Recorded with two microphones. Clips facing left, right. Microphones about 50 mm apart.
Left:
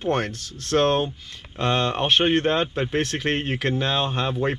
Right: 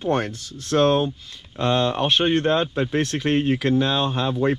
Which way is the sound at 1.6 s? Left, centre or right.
Left.